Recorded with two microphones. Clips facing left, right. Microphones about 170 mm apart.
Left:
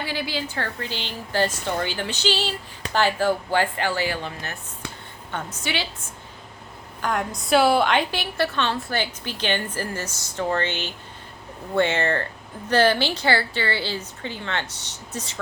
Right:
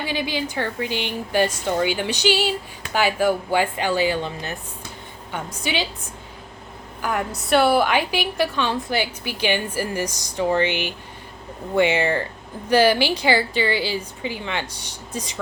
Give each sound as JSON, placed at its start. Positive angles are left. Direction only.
{"t": 0.0, "sound": "a woman's voice", "side_deg": -20}
{"t": 7.0, "sound": "a woman's voice", "side_deg": -5}